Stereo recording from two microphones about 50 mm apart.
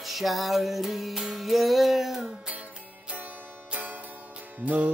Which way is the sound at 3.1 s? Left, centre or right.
Right.